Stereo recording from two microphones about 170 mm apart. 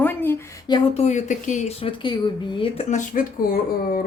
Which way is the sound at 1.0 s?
45° left (ahead or behind).